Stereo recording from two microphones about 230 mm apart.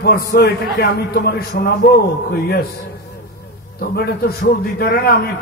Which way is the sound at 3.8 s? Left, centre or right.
Left.